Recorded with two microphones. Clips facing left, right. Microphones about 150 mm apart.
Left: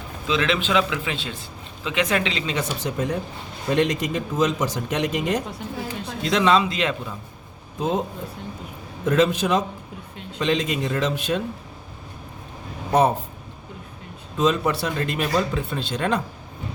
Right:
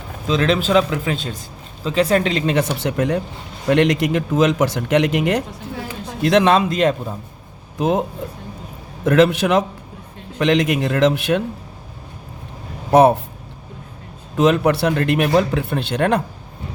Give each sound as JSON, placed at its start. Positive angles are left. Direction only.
{"t": 0.3, "sound": "a man's voice", "side_deg": -40}
{"t": 6.2, "sound": "a man's voice", "side_deg": -60}
{"t": 9.0, "sound": "speech", "side_deg": -80}
{"t": 12.9, "sound": "speech", "side_deg": -75}
{"t": 14.3, "sound": "speech", "side_deg": -70}